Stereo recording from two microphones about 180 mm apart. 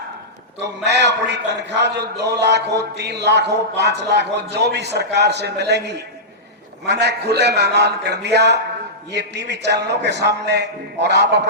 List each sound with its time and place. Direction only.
0.6 s a man's voice: 75° right (ahead or behind)